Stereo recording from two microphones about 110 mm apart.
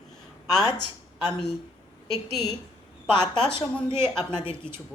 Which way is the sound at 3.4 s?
10° left (ahead or behind).